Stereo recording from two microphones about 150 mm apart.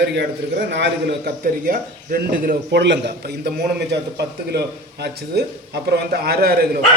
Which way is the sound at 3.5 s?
90° right.